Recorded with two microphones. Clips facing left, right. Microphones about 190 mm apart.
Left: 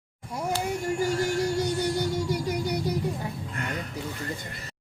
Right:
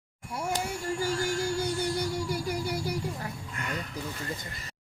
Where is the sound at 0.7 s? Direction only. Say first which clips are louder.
Left 4 dB; 20° left (ahead or behind).